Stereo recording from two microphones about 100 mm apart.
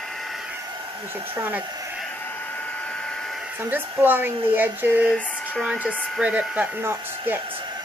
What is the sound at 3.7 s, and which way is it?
A woman's voice, 20° right (ahead or behind).